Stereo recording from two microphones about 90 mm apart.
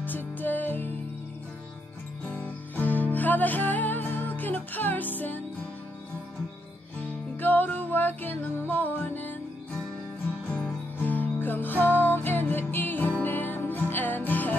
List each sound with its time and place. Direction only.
0.0 s music: 20° left (ahead or behind)
2.2 s music: 20° left (ahead or behind)
7.0 s music: 20° left (ahead or behind)
10.5 s music: 15° left (ahead or behind)